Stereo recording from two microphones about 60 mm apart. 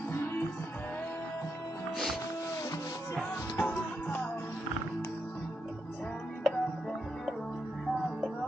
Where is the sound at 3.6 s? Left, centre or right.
Left.